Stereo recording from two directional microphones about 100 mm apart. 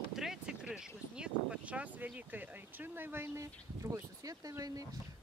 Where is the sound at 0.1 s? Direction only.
5° right (ahead or behind).